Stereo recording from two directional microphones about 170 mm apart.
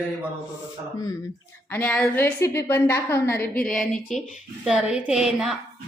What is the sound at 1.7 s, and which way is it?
A woman's voice, 10° left (ahead or behind).